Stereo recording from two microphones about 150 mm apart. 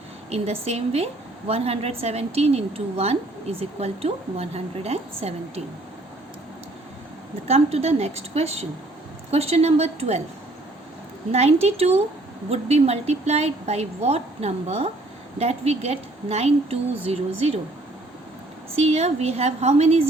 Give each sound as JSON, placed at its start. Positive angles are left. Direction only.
{"t": 0.3, "sound": "a woman's voice", "side_deg": -45}
{"t": 7.4, "sound": "a woman's voice", "side_deg": -45}
{"t": 11.3, "sound": "a woman's voice", "side_deg": -45}
{"t": 18.8, "sound": "a woman's voice", "side_deg": -45}